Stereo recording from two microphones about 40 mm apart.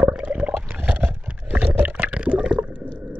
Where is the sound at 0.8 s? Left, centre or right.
Right.